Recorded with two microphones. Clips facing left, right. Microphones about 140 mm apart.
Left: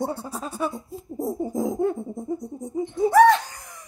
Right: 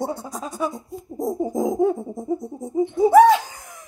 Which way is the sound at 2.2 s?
25° right (ahead or behind).